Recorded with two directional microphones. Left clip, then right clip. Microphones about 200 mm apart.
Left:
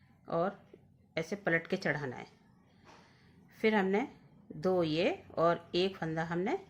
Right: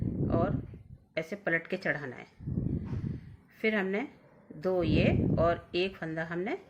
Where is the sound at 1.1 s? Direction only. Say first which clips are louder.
Right 1 dB; 25° left (ahead or behind).